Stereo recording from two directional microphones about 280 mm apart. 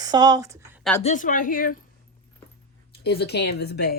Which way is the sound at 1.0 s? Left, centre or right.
Left.